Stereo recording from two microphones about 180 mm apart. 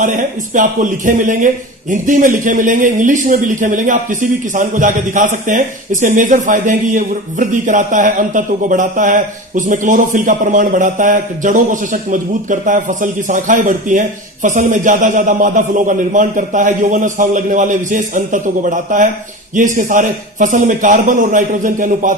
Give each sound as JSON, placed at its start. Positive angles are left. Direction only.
{"t": 0.0, "sound": "a man's voice", "side_deg": -45}